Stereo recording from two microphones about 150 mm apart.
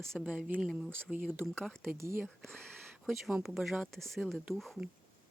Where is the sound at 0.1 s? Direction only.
5° right (ahead or behind).